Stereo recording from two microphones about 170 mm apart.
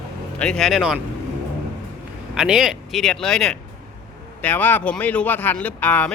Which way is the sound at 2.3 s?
5° right (ahead or behind).